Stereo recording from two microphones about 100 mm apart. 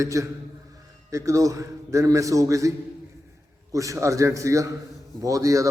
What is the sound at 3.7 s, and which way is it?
A man's voice, 30° right (ahead or behind).